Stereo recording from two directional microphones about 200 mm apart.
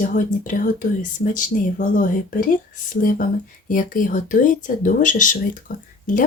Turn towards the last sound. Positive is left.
turn(degrees=40)  # may be behind; listen again after turning